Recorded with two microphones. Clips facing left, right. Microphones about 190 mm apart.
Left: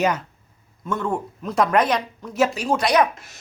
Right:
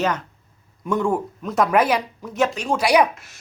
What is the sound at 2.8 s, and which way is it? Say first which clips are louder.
Speech: right 2 dB; 10° right (ahead or behind).